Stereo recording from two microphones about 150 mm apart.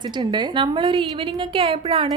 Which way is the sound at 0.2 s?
30° right (ahead or behind).